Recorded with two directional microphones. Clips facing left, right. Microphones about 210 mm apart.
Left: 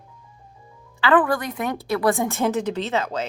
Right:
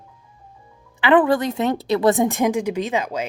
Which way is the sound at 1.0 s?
20° right (ahead or behind).